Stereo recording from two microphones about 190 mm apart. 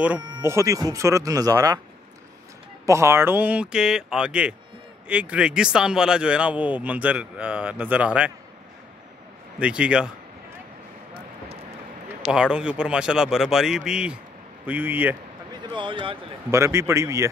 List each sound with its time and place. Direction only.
0.4 s speech: 15° right (ahead or behind)
2.9 s speech: 15° right (ahead or behind)
9.6 s speech: 5° right (ahead or behind)
12.3 s speech: 5° right (ahead or behind)
15.7 s speech: 25° right (ahead or behind)
16.4 s speech: 15° right (ahead or behind)